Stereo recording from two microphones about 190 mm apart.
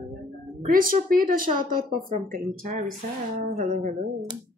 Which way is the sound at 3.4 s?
45° right (ahead or behind).